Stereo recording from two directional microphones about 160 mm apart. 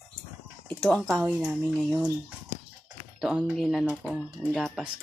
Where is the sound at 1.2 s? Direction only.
10° right (ahead or behind).